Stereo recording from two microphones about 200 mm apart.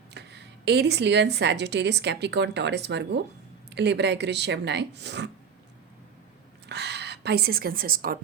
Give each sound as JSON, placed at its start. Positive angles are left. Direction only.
{"t": 0.1, "sound": "speech", "side_deg": -60}
{"t": 6.7, "sound": "speech", "side_deg": -55}